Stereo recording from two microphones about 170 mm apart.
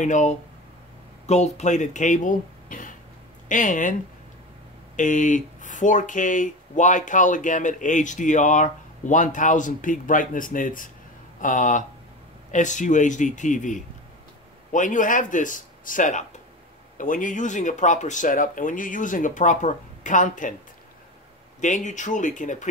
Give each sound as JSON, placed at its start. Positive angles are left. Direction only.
{"t": 0.0, "sound": "speech", "side_deg": 45}
{"t": 4.9, "sound": "speech", "side_deg": 45}
{"t": 21.5, "sound": "speech", "side_deg": 45}